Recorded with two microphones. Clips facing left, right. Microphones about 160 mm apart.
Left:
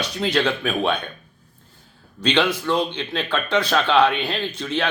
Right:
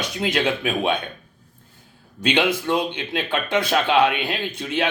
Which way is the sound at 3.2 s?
15° right (ahead or behind).